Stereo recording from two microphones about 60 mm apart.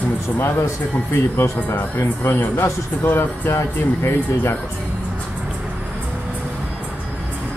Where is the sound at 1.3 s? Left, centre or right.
Left.